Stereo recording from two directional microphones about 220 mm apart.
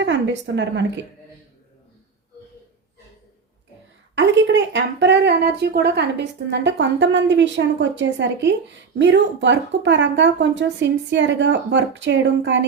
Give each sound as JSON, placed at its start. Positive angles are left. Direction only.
{"t": 0.0, "sound": "a woman's voice", "side_deg": -55}
{"t": 4.1, "sound": "speech", "side_deg": -55}